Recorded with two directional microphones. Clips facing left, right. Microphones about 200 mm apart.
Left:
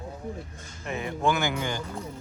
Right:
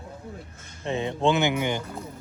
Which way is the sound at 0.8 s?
25° right (ahead or behind).